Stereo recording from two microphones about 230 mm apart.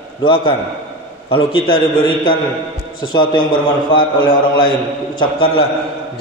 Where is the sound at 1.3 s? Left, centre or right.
Left.